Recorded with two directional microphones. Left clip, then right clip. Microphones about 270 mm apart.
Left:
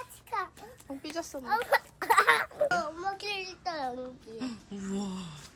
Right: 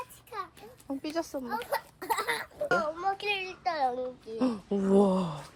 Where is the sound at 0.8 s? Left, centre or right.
Right.